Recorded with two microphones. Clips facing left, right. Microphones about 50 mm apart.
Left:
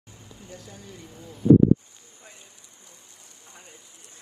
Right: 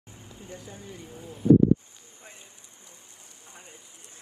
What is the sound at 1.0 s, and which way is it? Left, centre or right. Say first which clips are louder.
Speech: right 1 dB; right.